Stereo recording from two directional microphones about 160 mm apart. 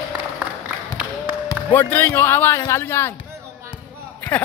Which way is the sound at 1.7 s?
15° left (ahead or behind).